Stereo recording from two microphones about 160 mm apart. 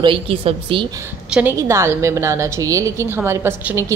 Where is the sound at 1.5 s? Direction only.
15° right (ahead or behind).